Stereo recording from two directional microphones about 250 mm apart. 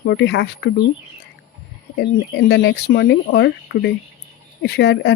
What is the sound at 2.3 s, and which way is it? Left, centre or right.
Speech, left.